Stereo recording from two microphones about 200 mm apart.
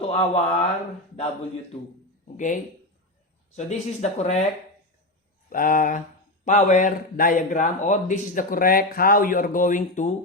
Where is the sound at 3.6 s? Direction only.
35° left (ahead or behind).